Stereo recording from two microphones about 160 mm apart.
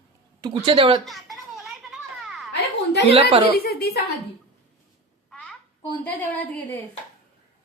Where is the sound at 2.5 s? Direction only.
90° left.